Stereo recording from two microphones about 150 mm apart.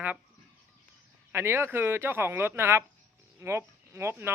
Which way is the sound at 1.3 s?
15° right (ahead or behind).